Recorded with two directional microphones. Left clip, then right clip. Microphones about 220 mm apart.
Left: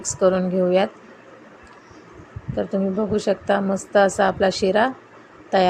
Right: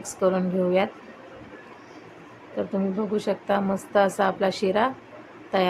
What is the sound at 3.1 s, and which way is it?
A woman's voice, 15° left (ahead or behind).